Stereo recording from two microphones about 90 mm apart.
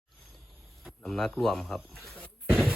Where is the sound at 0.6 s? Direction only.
Centre (ahead or behind).